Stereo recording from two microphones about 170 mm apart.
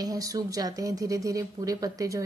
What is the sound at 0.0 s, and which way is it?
Speech, 20° right (ahead or behind).